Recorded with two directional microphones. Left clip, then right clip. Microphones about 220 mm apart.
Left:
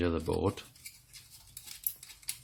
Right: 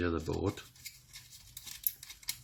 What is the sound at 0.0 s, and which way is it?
Speech, 40° left (ahead or behind).